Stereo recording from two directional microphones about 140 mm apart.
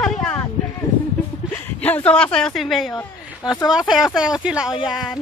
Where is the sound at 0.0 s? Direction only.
5° left (ahead or behind).